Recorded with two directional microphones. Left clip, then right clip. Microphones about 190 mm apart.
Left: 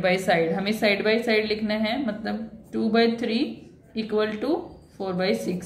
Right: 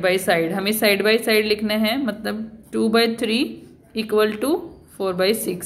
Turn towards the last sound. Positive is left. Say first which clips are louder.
# right 5 dB
turn(degrees=-40)  # may be behind; listen again after turning